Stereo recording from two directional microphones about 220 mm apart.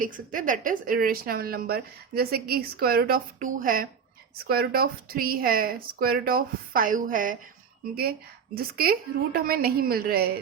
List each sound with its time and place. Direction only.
0.0 s a woman's voice: 35° right (ahead or behind)
8.5 s a woman's voice: 45° right (ahead or behind)